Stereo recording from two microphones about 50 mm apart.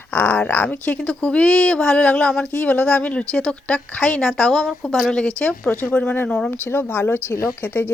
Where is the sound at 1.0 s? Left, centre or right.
Centre.